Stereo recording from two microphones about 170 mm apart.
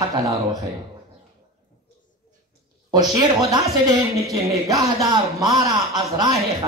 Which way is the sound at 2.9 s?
25° right (ahead or behind).